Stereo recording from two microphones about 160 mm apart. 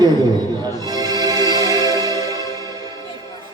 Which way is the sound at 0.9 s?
25° right (ahead or behind).